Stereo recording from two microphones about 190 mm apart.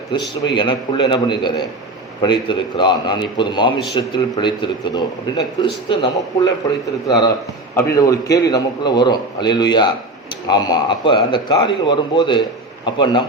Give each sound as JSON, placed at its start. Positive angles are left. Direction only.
{"t": 0.1, "sound": "a man's voice", "side_deg": 25}